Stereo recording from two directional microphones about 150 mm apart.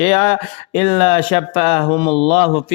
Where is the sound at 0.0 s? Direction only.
40° left (ahead or behind).